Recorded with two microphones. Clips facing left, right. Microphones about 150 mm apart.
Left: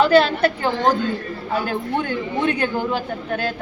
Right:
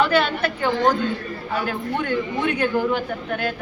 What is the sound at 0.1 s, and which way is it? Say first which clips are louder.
Speech: left 5 dB; 35° left (ahead or behind).